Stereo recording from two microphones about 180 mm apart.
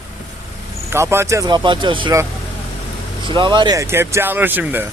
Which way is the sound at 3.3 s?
25° right (ahead or behind).